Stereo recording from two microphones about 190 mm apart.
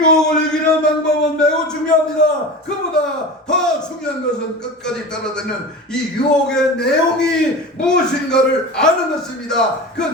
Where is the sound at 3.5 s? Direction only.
5° left (ahead or behind).